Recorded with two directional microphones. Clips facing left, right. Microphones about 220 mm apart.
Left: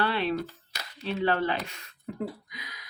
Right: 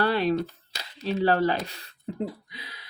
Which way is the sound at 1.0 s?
40° right (ahead or behind).